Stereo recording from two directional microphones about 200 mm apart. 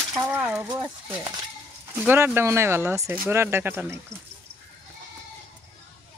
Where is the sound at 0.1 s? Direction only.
10° right (ahead or behind).